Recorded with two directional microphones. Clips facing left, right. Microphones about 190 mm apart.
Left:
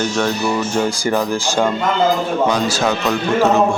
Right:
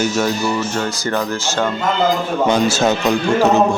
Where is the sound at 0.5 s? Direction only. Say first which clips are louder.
Left 2 dB; 10° left (ahead or behind).